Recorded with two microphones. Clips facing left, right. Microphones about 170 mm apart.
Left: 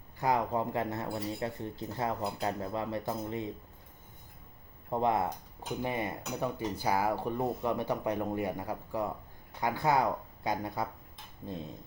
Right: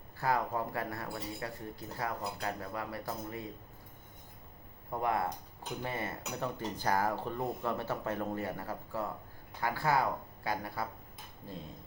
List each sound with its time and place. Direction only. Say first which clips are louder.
0.2 s speech: left 3 dB; 20° left (ahead or behind)
4.9 s speech: left 4 dB; 20° left (ahead or behind)